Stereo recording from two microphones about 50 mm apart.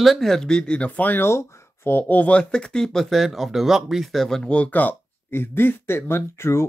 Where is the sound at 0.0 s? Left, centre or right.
Centre.